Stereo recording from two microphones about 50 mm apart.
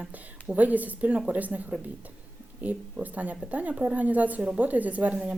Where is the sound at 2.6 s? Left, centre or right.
Right.